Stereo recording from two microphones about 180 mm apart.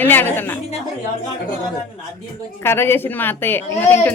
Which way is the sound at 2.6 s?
15° left (ahead or behind).